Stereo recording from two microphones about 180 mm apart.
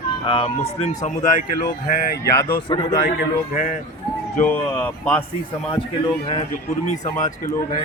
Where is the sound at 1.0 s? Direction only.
45° left (ahead or behind).